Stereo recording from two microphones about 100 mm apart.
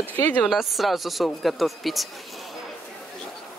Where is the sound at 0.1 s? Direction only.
20° left (ahead or behind).